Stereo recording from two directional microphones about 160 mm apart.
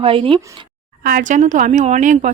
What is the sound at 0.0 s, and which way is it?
Speech, 35° right (ahead or behind).